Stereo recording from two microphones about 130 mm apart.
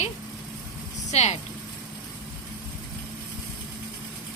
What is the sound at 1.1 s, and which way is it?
Speech, 60° left (ahead or behind).